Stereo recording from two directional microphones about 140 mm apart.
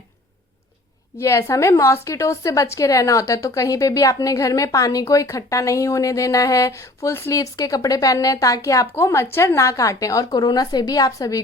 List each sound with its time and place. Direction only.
1.2 s a woman's voice: 20° left (ahead or behind)